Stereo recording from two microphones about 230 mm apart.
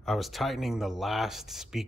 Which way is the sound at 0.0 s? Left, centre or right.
Centre.